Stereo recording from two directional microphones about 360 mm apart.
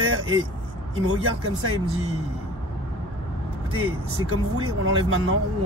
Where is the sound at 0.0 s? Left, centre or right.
Right.